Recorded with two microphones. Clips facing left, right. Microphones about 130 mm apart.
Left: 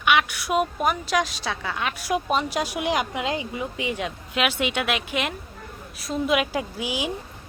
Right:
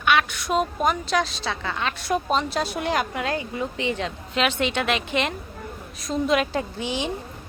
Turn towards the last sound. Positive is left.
turn(degrees=10)  # may be behind; listen again after turning